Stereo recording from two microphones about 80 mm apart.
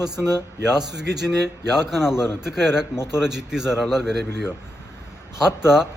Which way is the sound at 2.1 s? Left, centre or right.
Left.